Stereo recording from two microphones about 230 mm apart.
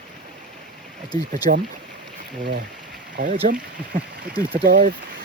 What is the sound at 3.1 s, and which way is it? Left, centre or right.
Speech, right.